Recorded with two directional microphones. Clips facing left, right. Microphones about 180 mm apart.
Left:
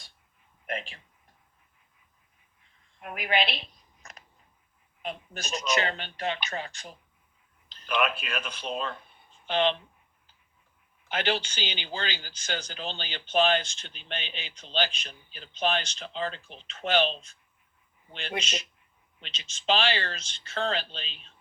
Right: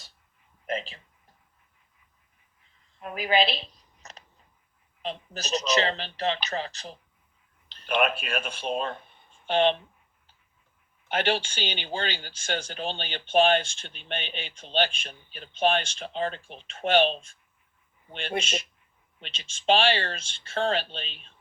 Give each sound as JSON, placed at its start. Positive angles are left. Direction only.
{"t": 0.7, "sound": "speech", "side_deg": -35}
{"t": 3.0, "sound": "a sound", "side_deg": -35}
{"t": 5.0, "sound": "speech", "side_deg": -35}
{"t": 7.7, "sound": "speech", "side_deg": -55}
{"t": 11.1, "sound": "speech", "side_deg": -50}